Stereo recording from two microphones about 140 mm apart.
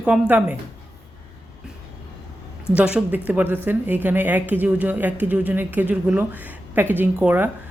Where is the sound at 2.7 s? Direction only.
10° right (ahead or behind).